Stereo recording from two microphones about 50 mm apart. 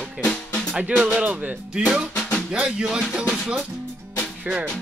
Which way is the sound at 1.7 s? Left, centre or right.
Centre.